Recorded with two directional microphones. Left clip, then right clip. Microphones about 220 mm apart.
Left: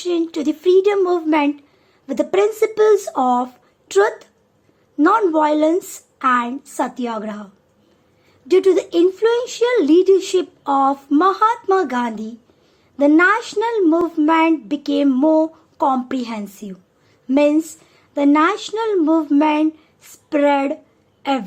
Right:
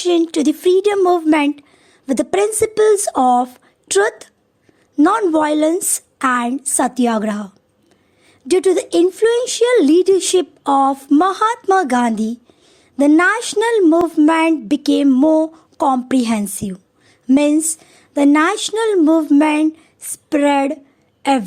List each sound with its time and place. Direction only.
0.0 s a woman's voice: 40° right (ahead or behind)